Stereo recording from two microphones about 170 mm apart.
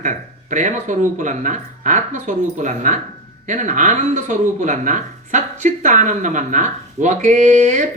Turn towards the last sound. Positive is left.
turn(degrees=-45)  # may be behind; listen again after turning